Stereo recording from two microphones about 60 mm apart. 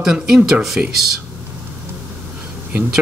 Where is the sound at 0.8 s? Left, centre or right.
Right.